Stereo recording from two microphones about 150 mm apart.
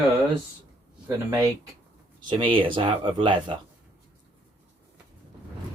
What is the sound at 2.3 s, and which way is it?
Speech, 35° right (ahead or behind).